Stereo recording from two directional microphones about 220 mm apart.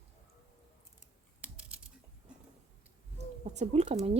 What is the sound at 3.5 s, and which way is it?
Speech, 30° right (ahead or behind).